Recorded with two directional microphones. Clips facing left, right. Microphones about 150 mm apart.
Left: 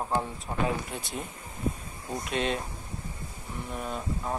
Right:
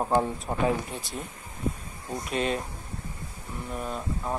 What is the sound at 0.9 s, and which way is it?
Speech, centre (ahead or behind).